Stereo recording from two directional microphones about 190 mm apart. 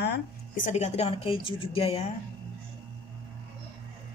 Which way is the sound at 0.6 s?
35° left (ahead or behind).